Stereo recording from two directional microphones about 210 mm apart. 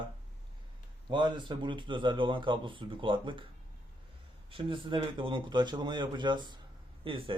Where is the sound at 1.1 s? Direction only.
20° right (ahead or behind).